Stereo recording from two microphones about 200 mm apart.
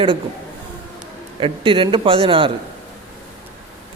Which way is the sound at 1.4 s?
25° right (ahead or behind).